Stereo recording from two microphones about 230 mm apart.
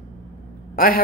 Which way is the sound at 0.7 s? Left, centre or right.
Left.